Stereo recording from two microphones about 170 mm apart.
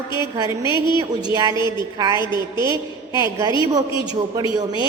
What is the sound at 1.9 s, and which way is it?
A woman's voice, 20° right (ahead or behind).